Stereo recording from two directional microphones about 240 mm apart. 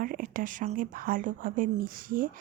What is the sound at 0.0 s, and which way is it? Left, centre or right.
A woman's voice, right.